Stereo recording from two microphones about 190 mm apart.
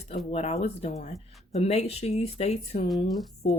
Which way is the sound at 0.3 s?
35° left (ahead or behind).